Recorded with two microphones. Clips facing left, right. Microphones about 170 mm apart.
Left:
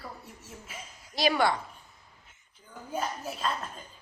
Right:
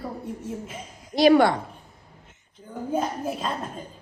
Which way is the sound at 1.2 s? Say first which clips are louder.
Right 9 dB; 55° right (ahead or behind).